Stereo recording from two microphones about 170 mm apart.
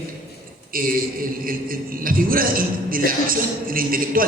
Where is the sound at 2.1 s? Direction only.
55° right (ahead or behind).